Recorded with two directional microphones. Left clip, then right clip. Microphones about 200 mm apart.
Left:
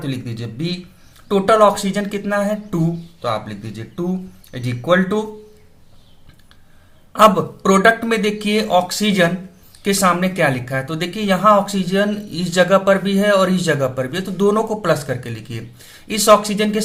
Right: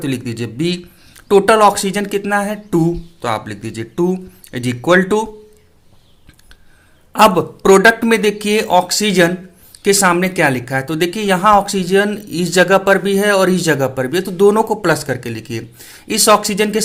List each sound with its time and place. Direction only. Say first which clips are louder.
0.0 s speech: right 6 dB; 50° right (ahead or behind)
7.1 s speech: right 1 dB; 40° right (ahead or behind)